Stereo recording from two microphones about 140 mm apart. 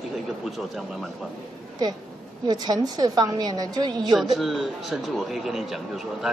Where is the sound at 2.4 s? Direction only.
30° right (ahead or behind).